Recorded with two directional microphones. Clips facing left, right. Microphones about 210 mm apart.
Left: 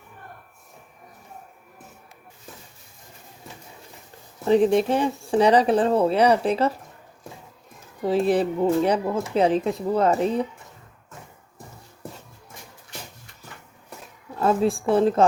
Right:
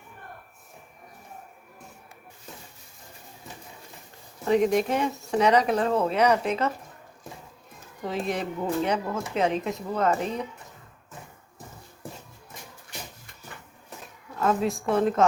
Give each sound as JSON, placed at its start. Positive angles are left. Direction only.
{"t": 4.4, "sound": "speech", "side_deg": 30}
{"t": 8.0, "sound": "speech", "side_deg": 35}
{"t": 14.3, "sound": "speech", "side_deg": 30}